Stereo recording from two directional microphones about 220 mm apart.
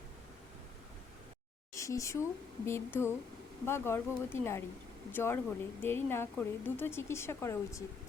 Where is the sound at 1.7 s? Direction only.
15° left (ahead or behind).